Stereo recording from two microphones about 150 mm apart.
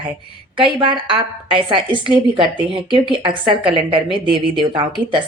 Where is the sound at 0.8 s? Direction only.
35° right (ahead or behind).